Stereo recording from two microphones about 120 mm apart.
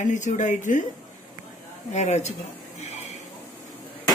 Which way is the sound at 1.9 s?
70° left (ahead or behind).